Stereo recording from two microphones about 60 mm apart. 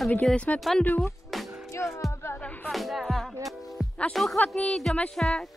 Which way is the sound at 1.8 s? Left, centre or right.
Left.